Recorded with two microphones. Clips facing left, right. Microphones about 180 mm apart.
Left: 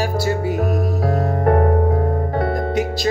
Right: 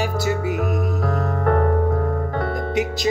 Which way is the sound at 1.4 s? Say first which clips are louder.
Left 3 dB; 35° left (ahead or behind).